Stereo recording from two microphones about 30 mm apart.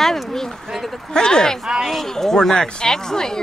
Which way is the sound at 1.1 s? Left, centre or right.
Left.